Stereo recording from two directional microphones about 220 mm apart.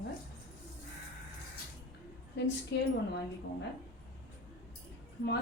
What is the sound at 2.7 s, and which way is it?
Speech, 50° left (ahead or behind).